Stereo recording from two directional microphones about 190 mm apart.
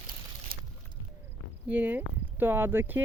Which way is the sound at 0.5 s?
50° right (ahead or behind).